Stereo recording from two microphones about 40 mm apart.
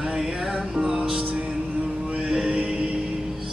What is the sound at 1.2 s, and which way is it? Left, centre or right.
Music, right.